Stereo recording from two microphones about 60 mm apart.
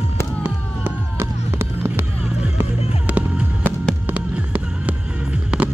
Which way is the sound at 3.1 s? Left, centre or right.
Right.